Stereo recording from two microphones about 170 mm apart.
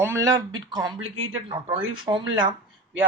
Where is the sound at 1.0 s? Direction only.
40° right (ahead or behind).